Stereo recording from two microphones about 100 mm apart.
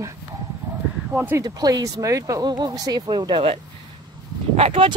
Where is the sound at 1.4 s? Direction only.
40° right (ahead or behind).